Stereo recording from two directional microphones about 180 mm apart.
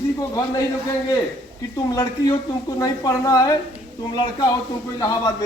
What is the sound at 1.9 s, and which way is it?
Speech, 20° left (ahead or behind).